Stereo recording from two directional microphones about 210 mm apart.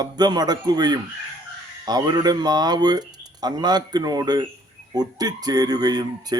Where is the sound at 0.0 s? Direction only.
20° right (ahead or behind).